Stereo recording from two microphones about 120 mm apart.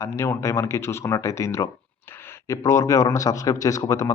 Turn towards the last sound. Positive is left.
turn(degrees=30)  # may be behind; listen again after turning